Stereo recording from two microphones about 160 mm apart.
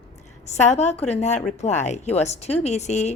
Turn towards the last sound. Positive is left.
turn(degrees=45)  # may be behind; listen again after turning